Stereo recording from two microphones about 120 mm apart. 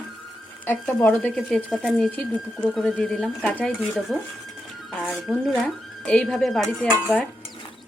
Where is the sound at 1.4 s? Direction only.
5° left (ahead or behind).